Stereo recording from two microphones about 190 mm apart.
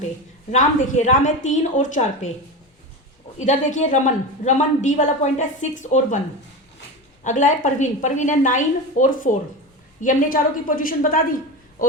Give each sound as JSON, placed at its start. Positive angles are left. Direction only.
{"t": 0.5, "sound": "a woman's voice", "side_deg": 40}
{"t": 3.3, "sound": "a woman's voice", "side_deg": 40}
{"t": 7.3, "sound": "a woman's voice", "side_deg": 40}